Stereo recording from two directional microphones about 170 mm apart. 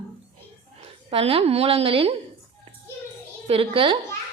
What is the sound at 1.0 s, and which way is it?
A woman's voice, 35° right (ahead or behind).